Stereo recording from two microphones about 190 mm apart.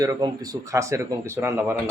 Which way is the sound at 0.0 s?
20° right (ahead or behind).